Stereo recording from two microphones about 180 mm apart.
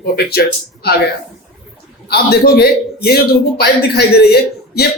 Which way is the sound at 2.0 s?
60° left (ahead or behind).